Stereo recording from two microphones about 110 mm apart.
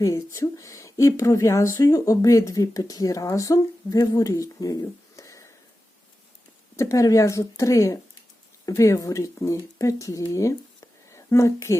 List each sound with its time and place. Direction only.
0.0 s speech: 30° left (ahead or behind)
6.7 s speech: 30° left (ahead or behind)